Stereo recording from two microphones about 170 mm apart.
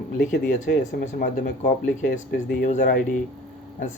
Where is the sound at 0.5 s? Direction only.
45° left (ahead or behind).